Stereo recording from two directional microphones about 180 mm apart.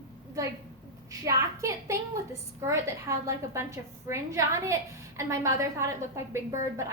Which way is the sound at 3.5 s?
15° right (ahead or behind).